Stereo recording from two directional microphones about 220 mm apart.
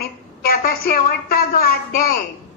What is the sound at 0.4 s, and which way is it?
A woman's voice, 45° left (ahead or behind).